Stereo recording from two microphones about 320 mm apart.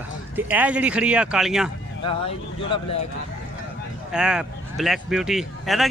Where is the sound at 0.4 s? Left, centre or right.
Centre.